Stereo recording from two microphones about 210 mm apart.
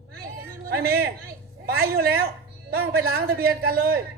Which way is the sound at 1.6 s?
45° right (ahead or behind).